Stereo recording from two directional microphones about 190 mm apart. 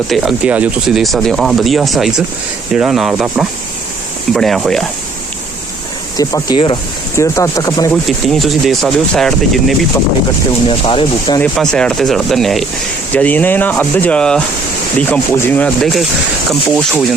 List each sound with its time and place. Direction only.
0.1 s speech: 5° right (ahead or behind)
6.1 s speech: 20° left (ahead or behind)
8.0 s speech: centre (ahead or behind)
10.7 s speech: 30° left (ahead or behind)
11.3 s speech: 5° left (ahead or behind)